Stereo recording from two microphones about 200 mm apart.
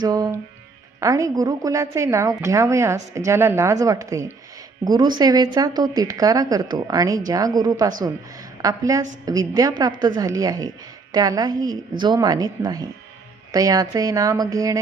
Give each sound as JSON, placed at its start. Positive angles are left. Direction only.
{"t": 0.0, "sound": "speech", "side_deg": -20}